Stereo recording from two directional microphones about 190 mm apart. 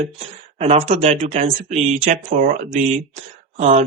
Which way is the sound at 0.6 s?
35° right (ahead or behind).